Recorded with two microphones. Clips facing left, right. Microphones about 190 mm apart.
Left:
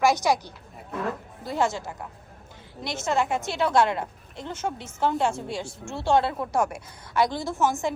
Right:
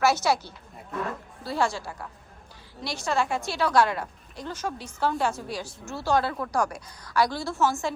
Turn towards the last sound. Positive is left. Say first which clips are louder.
# left 1 dB
turn(degrees=20)  # may be behind; listen again after turning